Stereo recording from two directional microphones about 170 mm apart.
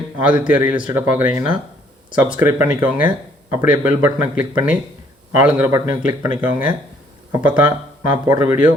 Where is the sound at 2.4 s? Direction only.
10° right (ahead or behind).